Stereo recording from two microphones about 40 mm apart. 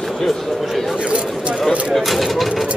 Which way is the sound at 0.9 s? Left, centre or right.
Right.